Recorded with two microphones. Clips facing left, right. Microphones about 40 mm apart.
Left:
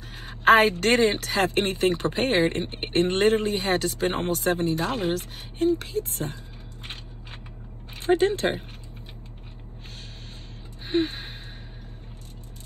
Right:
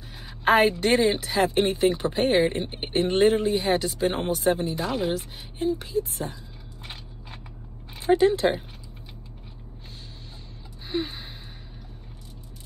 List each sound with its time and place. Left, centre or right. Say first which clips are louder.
0.1 s speech: left 3 dB; left
6.8 s a sound: left 1 dB; left
7.9 s speech: right 2 dB; left
10.9 s gasp: left 5 dB; left